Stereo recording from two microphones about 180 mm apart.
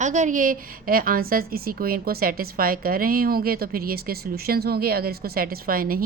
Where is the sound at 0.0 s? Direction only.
40° right (ahead or behind).